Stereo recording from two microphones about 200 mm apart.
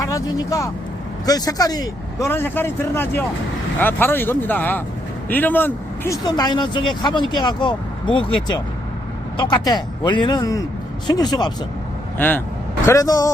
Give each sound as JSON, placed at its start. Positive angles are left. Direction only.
{"t": 0.0, "sound": "speech", "side_deg": 15}
{"t": 12.1, "sound": "speech", "side_deg": 10}